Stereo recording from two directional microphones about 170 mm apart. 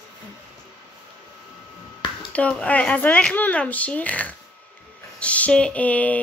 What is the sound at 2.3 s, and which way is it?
Speech, 10° left (ahead or behind).